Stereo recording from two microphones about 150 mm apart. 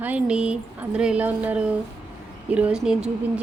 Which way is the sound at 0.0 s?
10° right (ahead or behind).